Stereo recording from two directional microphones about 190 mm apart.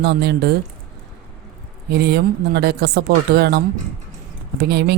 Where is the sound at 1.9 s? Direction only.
60° right (ahead or behind).